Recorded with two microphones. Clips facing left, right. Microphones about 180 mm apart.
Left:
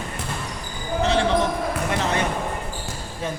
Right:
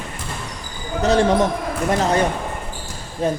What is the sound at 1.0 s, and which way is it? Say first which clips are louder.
Music: right 5 dB; 40° right (ahead or behind).